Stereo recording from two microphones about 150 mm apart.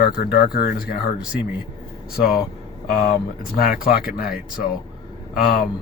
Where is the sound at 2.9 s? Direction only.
90° left.